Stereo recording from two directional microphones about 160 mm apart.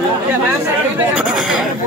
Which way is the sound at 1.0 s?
5° right (ahead or behind).